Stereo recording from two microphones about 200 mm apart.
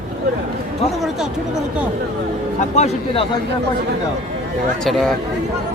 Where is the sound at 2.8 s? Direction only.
30° left (ahead or behind).